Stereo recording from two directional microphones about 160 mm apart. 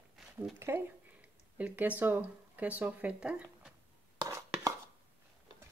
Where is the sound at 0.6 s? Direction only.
15° right (ahead or behind).